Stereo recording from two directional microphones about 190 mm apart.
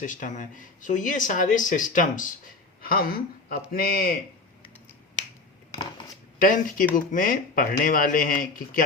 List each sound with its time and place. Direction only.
0.0 s speech: 45° left (ahead or behind)
6.4 s speech: 45° left (ahead or behind)